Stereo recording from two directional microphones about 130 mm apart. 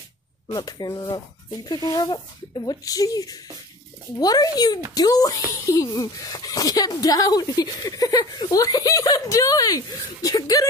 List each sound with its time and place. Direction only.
0.5 s speech: 30° left (ahead or behind)